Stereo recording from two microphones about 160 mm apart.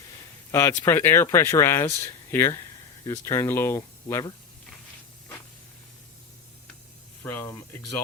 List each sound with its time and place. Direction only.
0.5 s speech: 15° left (ahead or behind)
7.2 s speech: 15° left (ahead or behind)